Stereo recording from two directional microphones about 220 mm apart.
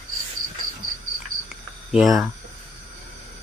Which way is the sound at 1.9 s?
Centre (ahead or behind).